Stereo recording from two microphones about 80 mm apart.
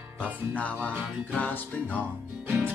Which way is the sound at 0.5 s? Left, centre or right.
Centre.